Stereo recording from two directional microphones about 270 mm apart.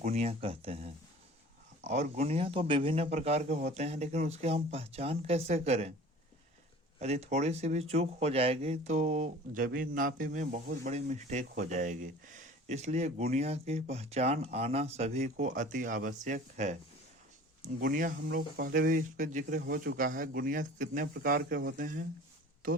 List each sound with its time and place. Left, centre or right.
0.0 s speech: right
7.0 s speech: right